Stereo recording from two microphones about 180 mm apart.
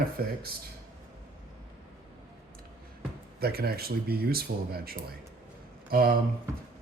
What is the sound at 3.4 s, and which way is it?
Speech, 60° right (ahead or behind).